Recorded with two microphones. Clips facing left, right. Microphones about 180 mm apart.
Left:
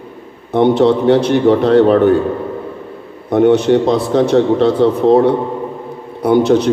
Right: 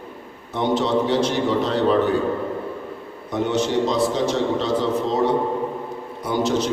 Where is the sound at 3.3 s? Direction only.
60° left (ahead or behind).